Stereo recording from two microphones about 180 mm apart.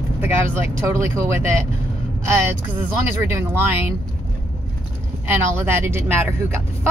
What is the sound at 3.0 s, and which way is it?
Speech, 15° right (ahead or behind).